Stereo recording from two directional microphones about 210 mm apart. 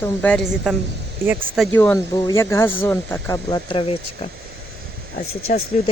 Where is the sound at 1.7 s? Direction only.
10° left (ahead or behind); by 4.0 s 25° left (ahead or behind).